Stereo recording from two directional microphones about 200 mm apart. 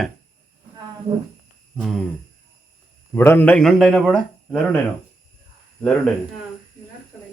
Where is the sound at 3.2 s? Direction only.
10° left (ahead or behind).